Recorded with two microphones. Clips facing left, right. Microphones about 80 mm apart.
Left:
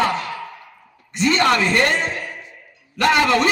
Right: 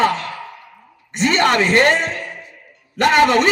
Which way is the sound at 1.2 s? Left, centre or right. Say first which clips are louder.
Right 1 dB; right.